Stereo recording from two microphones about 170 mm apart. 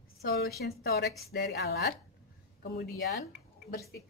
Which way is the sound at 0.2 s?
65° left (ahead or behind).